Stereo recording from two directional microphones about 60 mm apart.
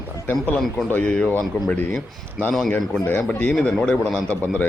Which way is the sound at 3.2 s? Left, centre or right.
Centre.